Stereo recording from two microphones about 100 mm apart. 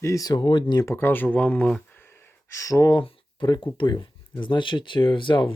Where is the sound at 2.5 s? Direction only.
30° left (ahead or behind).